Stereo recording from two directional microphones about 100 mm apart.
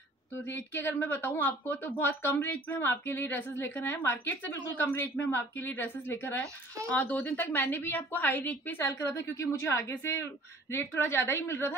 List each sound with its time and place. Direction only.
0.5 s speech: 20° left (ahead or behind)